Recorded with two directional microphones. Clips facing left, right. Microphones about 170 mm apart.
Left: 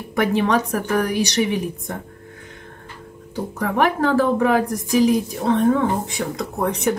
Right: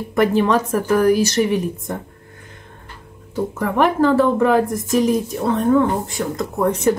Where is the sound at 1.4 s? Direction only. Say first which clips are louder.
Right 3 dB; centre (ahead or behind).